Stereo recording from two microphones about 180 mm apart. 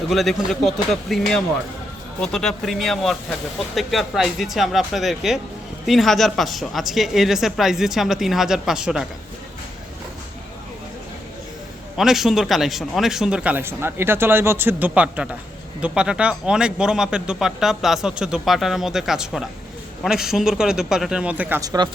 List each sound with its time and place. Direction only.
0.1 s speech: centre (ahead or behind)
11.9 s speech: centre (ahead or behind)
21.6 s speech: 20° right (ahead or behind)